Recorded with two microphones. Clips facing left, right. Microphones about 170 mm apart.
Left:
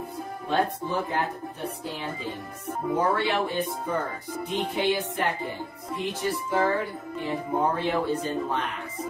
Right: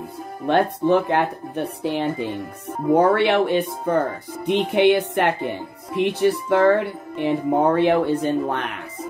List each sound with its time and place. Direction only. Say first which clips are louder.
0.5 s speech: right 9 dB; 70° right (ahead or behind)